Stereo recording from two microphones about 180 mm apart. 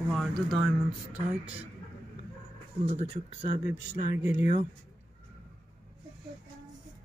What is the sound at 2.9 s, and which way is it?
Speech, 40° right (ahead or behind).